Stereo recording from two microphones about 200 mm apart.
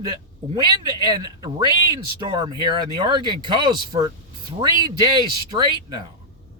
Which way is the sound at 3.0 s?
25° right (ahead or behind).